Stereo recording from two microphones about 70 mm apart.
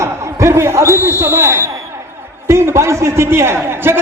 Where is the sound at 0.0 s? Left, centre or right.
Right.